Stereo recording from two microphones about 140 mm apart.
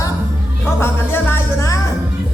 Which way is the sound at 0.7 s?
15° left (ahead or behind).